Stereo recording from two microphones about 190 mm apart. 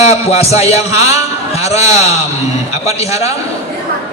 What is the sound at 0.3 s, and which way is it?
Speech, 35° left (ahead or behind).